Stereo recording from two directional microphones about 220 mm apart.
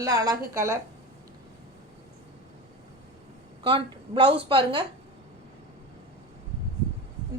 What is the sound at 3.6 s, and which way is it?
A woman's voice, 25° right (ahead or behind).